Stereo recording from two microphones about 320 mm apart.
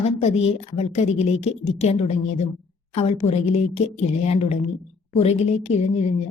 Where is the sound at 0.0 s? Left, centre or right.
Centre.